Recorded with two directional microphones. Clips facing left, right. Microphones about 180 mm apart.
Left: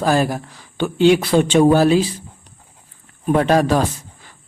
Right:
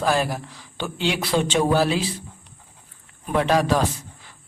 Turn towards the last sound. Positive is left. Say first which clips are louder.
# left 4 dB
turn(degrees=45)  # may be behind; listen again after turning